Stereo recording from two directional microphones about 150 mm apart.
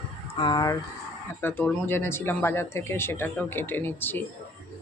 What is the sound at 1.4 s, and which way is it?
Speech, 15° left (ahead or behind).